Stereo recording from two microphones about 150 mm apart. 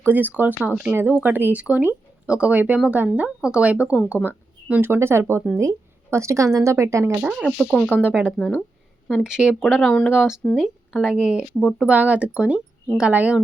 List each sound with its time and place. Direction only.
0.0 s a woman's voice: 10° right (ahead or behind)
7.2 s speech: 5° right (ahead or behind)
8.0 s speech: 10° right (ahead or behind)
8.3 s speech: centre (ahead or behind)